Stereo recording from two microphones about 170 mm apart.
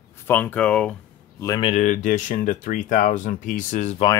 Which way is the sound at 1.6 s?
45° left (ahead or behind).